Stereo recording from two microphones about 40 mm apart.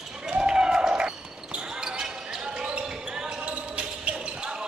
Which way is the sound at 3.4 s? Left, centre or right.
Right.